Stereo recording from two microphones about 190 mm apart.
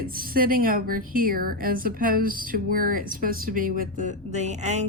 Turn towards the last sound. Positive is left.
turn(degrees=-35)  # may be behind; listen again after turning